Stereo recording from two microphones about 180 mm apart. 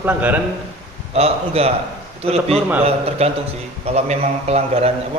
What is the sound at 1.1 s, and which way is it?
A man's voice, 35° right (ahead or behind).